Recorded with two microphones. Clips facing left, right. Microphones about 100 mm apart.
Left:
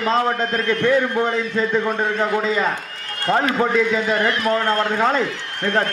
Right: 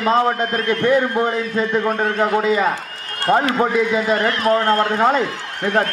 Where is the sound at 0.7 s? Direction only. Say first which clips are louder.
Right 2 dB; 35° right (ahead or behind).